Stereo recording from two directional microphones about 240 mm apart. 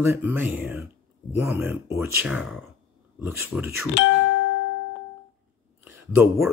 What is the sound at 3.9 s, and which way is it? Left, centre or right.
Music, left.